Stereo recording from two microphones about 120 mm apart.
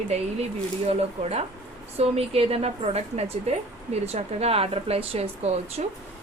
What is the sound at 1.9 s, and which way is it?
A woman's voice, 55° right (ahead or behind).